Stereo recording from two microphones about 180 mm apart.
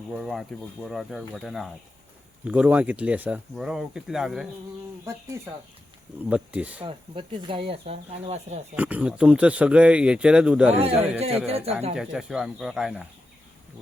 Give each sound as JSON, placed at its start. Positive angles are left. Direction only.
{"t": 0.1, "sound": "speech", "side_deg": 0}
{"t": 6.2, "sound": "speech", "side_deg": -5}
{"t": 6.8, "sound": "speech", "side_deg": -30}
{"t": 8.7, "sound": "speech", "side_deg": -10}
{"t": 10.8, "sound": "speech", "side_deg": -35}
{"t": 11.9, "sound": "speech", "side_deg": -5}